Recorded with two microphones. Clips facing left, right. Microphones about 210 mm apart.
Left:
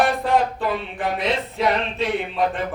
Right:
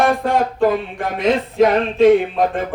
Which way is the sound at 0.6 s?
45° right (ahead or behind).